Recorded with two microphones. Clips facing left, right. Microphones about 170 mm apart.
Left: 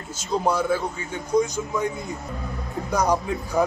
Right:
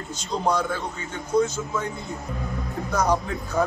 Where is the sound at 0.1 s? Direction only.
10° left (ahead or behind).